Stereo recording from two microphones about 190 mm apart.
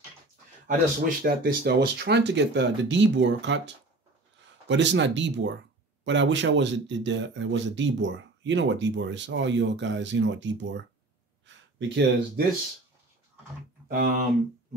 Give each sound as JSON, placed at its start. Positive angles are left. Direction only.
{"t": 0.7, "sound": "speech", "side_deg": -50}
{"t": 13.8, "sound": "speech", "side_deg": -55}